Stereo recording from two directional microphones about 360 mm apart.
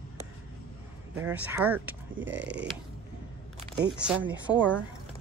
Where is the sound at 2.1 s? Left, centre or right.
Right.